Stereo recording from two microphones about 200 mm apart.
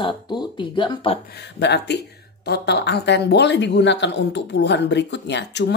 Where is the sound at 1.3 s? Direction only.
60° left (ahead or behind).